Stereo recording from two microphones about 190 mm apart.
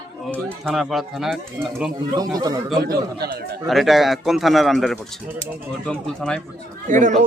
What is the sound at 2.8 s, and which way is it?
Speech, 55° right (ahead or behind).